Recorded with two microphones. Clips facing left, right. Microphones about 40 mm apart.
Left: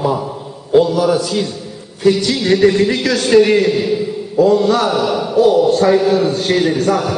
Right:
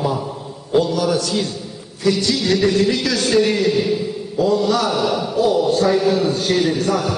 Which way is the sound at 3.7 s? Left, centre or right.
Centre.